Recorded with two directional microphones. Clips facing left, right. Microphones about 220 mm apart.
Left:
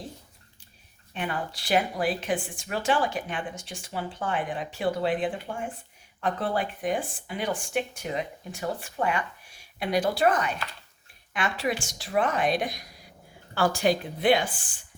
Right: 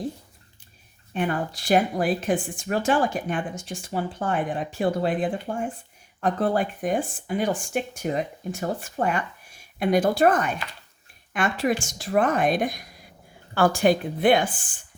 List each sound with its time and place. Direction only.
1.1 s speech: 45° right (ahead or behind)